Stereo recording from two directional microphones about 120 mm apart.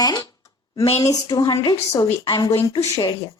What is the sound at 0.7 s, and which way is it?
Speech, 55° left (ahead or behind).